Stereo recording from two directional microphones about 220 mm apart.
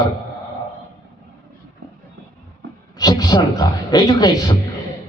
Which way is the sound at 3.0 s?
15° left (ahead or behind).